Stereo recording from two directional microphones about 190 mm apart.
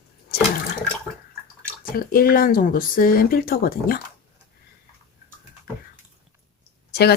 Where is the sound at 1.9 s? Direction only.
50° left (ahead or behind).